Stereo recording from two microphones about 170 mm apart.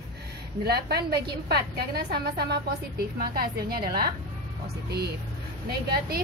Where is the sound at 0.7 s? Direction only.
70° right (ahead or behind).